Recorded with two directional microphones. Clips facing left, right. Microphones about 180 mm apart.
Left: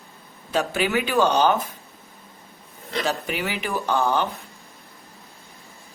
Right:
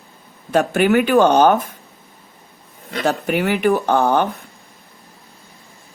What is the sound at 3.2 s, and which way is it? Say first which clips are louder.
Speech: right 11 dB; 55° right (ahead or behind).